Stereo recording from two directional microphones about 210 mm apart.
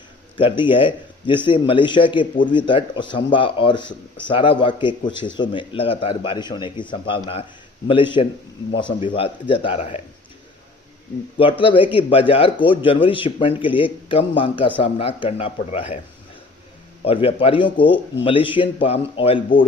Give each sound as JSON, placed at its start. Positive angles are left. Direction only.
{"t": 0.3, "sound": "speech", "side_deg": 25}
{"t": 11.3, "sound": "speech", "side_deg": 25}
{"t": 17.1, "sound": "speech", "side_deg": 25}